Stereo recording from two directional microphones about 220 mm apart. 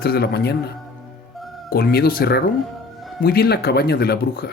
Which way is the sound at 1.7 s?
45° left (ahead or behind).